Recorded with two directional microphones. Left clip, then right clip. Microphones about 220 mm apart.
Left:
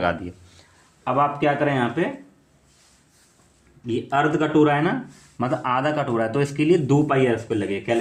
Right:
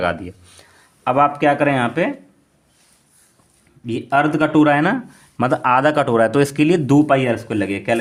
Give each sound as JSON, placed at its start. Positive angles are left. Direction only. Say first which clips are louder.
{"t": 0.0, "sound": "speech", "louder": "right 3 dB", "side_deg": -15}
{"t": 1.0, "sound": "speech", "louder": "right 5 dB", "side_deg": -45}
{"t": 3.8, "sound": "speech", "louder": "right 4 dB", "side_deg": -50}